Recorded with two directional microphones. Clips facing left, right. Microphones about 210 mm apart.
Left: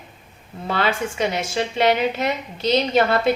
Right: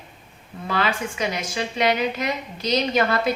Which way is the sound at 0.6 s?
30° left (ahead or behind).